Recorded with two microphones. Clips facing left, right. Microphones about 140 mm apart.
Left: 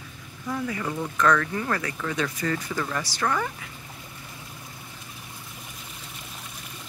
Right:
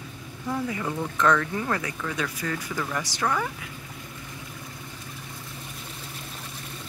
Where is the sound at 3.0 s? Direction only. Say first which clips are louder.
Even; 15° right (ahead or behind).